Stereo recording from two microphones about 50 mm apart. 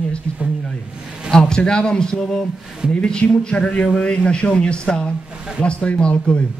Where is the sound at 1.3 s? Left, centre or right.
Centre.